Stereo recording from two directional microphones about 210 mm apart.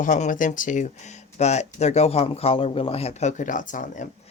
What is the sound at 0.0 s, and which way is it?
Speech, 35° left (ahead or behind).